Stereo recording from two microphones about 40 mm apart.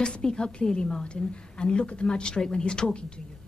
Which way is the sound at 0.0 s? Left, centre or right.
Left.